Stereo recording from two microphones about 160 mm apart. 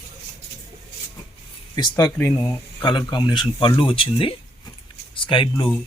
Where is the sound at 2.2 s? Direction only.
10° left (ahead or behind).